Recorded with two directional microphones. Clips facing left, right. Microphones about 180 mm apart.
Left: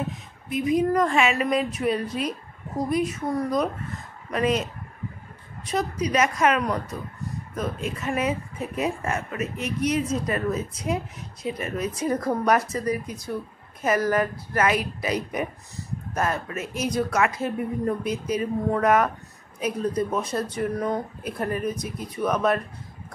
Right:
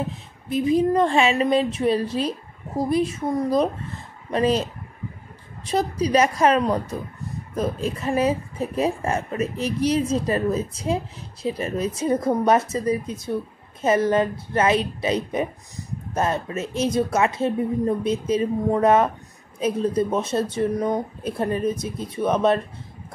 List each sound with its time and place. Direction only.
0.5 s a woman's voice: 30° right (ahead or behind)